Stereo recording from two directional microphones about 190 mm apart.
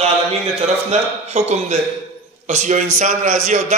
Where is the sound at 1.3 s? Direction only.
35° right (ahead or behind).